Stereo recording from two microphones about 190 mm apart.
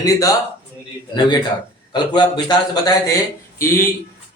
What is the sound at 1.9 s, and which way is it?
A man's voice, 25° left (ahead or behind).